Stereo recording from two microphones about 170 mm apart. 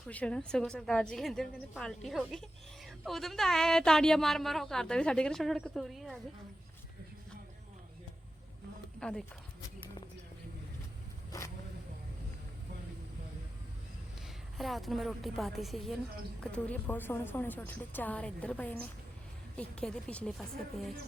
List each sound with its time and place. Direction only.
0.1 s speech: 5° left (ahead or behind)
9.0 s speech: 5° left (ahead or behind)
11.3 s vehicle: 15° left (ahead or behind)
14.3 s a woman's voice: centre (ahead or behind)